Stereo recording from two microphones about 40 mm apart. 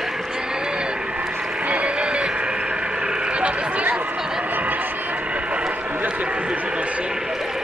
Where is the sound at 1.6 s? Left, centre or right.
Right.